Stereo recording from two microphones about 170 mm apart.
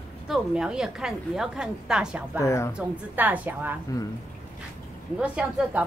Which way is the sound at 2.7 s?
10° right (ahead or behind).